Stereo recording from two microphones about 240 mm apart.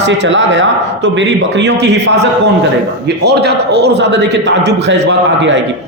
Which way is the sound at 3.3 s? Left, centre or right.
Right.